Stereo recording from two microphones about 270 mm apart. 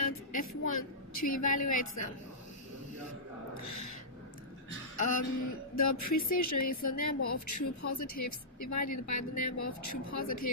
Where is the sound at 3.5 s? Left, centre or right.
Left.